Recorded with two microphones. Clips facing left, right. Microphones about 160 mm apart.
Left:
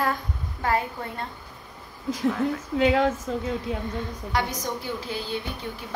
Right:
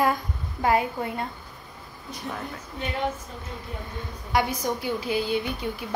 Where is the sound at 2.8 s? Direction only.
90° left.